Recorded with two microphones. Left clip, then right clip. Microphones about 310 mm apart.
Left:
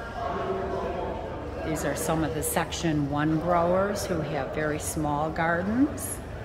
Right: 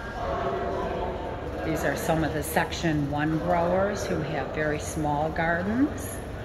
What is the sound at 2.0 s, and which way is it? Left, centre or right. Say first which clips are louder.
A woman's voice: right 1 dB; centre.